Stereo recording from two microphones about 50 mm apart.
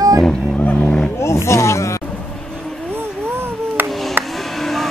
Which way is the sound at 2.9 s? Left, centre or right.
Right.